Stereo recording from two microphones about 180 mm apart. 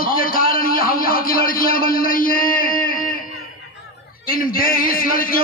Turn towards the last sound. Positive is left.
turn(degrees=50)  # may be behind; listen again after turning